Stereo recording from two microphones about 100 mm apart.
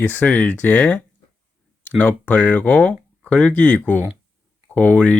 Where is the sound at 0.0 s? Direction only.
15° left (ahead or behind).